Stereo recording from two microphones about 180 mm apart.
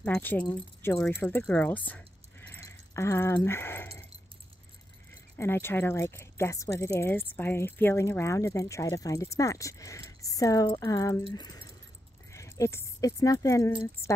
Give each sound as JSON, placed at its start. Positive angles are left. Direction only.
{"t": 0.0, "sound": "speech", "side_deg": 10}
{"t": 5.4, "sound": "speech", "side_deg": 15}
{"t": 11.3, "sound": "keys jangling", "side_deg": 20}
{"t": 12.3, "sound": "speech", "side_deg": 15}